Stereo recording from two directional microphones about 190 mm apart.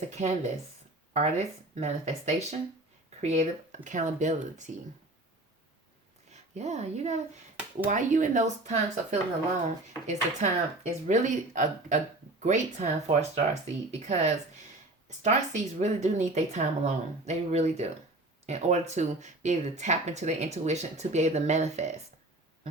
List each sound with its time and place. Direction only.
0.1 s speech: 35° right (ahead or behind)
6.3 s speech: 35° right (ahead or behind)